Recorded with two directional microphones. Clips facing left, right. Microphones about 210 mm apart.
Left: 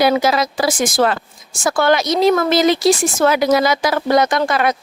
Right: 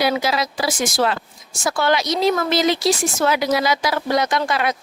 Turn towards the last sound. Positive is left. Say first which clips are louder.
# left 4 dB
turn(degrees=50)  # may be behind; listen again after turning